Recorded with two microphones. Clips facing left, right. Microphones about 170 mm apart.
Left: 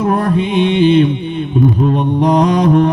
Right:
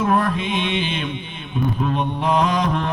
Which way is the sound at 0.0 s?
35° left (ahead or behind).